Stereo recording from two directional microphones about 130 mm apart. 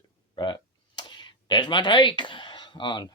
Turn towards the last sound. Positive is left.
turn(degrees=35)  # may be behind; listen again after turning